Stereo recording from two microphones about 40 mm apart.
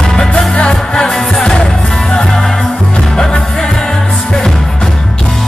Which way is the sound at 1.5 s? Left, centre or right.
Centre.